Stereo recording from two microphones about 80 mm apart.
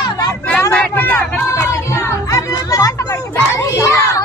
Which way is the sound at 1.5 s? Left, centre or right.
Left.